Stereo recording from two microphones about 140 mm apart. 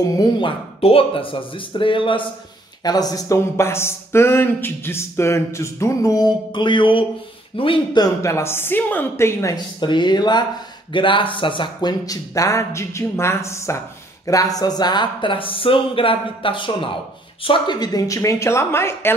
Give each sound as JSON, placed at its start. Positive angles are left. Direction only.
{"t": 0.0, "sound": "speech", "side_deg": 30}
{"t": 9.8, "sound": "speech", "side_deg": 35}